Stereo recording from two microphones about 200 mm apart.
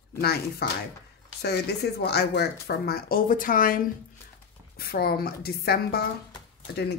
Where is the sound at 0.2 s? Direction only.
50° left (ahead or behind).